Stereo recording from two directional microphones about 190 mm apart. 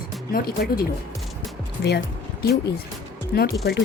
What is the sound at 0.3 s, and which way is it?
Speech, 55° left (ahead or behind).